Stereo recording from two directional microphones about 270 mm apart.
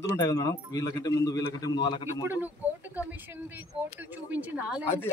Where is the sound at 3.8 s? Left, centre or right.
Centre.